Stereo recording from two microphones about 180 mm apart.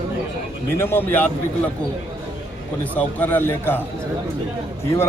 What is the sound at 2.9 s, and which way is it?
Speech, 10° left (ahead or behind).